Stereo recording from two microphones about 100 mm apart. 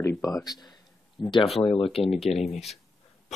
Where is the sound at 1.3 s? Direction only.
75° left (ahead or behind).